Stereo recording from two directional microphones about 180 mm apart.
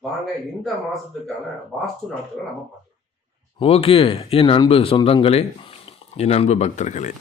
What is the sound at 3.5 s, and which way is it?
Speech, 35° left (ahead or behind).